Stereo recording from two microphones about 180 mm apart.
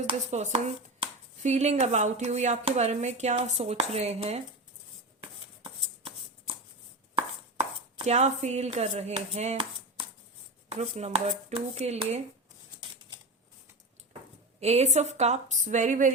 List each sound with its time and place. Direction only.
0.1 s speech: 40° right (ahead or behind)
5.2 s shuffle: 30° right (ahead or behind)
7.2 s chopping: 35° right (ahead or behind)
10.7 s speech: 35° right (ahead or behind)
14.6 s speech: 35° right (ahead or behind)